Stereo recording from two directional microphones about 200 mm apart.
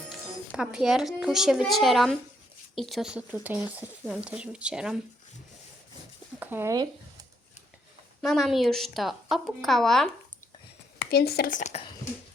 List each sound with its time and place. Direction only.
0.1 s speech: 5° right (ahead or behind)
6.4 s speech: 10° right (ahead or behind)
8.2 s speech: centre (ahead or behind)
11.0 s speech: 50° left (ahead or behind)